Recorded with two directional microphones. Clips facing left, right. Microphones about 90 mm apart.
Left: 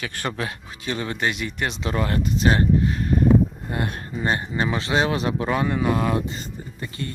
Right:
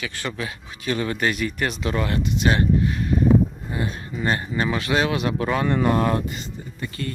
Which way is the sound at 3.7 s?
60° left (ahead or behind).